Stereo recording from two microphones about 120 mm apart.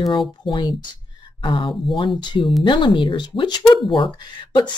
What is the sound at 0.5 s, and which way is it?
Speech, 40° left (ahead or behind).